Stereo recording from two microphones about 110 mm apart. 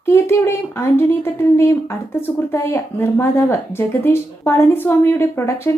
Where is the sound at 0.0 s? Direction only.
25° left (ahead or behind).